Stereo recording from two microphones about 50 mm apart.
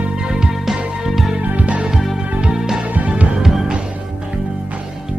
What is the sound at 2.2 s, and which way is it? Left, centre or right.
Music, right.